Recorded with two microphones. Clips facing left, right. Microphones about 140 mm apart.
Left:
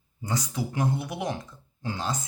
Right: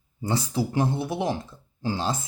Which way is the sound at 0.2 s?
30° right (ahead or behind).